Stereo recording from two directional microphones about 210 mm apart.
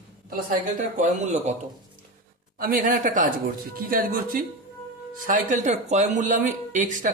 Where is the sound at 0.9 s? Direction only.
35° right (ahead or behind).